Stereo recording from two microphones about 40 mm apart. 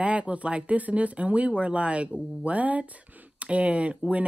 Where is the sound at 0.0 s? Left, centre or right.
Right.